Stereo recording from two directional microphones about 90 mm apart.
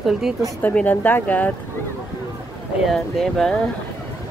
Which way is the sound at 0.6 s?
15° left (ahead or behind).